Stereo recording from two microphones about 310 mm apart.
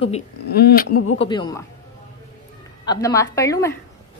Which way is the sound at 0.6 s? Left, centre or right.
Left.